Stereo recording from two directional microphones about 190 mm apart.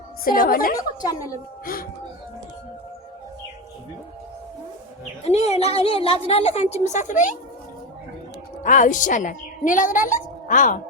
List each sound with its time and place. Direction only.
0.3 s a woman's voice: 45° left (ahead or behind)
0.8 s a woman's voice: 20° left (ahead or behind)
1.6 s a woman's voice: 50° left (ahead or behind)
5.2 s a woman's voice: 35° left (ahead or behind)
8.6 s a woman's voice: 40° left (ahead or behind)